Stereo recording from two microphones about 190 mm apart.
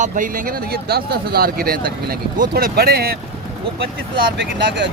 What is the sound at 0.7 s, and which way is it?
Speech, 55° right (ahead or behind).